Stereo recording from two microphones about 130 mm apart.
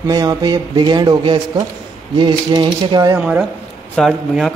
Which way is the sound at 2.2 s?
35° right (ahead or behind).